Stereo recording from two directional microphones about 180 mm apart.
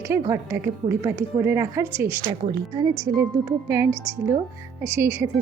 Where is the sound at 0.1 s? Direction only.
15° right (ahead or behind).